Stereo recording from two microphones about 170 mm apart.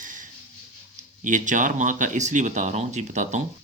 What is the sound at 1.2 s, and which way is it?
Speech, 50° right (ahead or behind).